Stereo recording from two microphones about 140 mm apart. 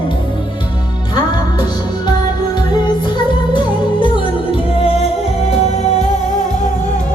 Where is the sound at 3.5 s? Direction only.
35° left (ahead or behind).